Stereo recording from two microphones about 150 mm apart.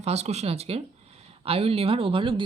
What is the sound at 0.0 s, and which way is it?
Speech, 45° right (ahead or behind).